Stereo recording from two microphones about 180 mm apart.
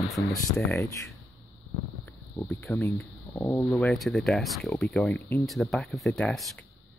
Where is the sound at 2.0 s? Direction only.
15° left (ahead or behind).